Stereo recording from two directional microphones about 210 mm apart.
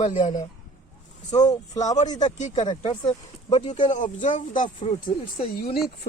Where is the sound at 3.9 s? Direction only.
35° left (ahead or behind).